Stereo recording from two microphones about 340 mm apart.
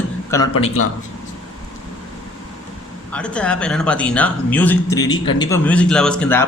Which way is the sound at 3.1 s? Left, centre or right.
Centre.